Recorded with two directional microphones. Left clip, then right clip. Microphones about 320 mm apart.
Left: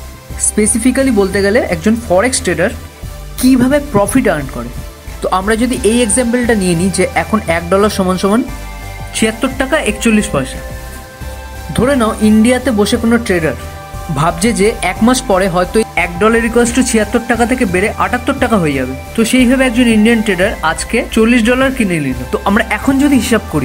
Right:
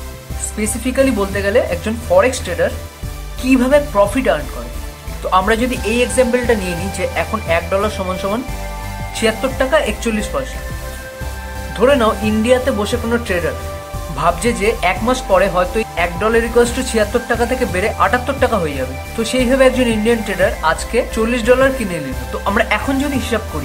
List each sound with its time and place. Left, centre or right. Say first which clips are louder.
0.6 s speech: left 3 dB; centre
11.7 s speech: even; centre